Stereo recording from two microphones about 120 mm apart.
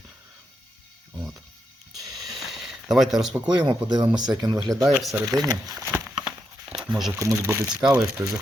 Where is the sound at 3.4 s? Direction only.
35° right (ahead or behind).